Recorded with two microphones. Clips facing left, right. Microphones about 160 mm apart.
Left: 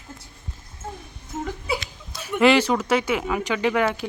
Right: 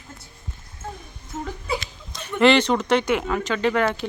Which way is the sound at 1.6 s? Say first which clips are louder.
Even; 5° left (ahead or behind).